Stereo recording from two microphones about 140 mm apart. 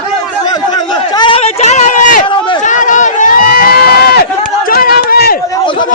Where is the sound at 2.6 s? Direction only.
65° left (ahead or behind); by 5.3 s 90° left.